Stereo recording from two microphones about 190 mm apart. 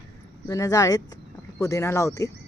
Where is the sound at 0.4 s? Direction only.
20° left (ahead or behind).